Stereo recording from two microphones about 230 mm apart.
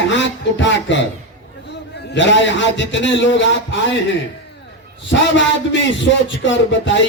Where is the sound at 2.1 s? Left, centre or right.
Left.